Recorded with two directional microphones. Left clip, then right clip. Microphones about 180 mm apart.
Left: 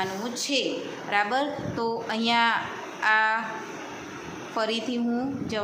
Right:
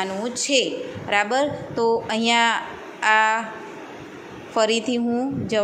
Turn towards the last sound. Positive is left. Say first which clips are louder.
# right 6 dB
turn(degrees=-30)  # may be behind; listen again after turning